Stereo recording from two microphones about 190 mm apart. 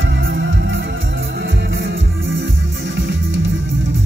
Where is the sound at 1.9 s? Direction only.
90° right.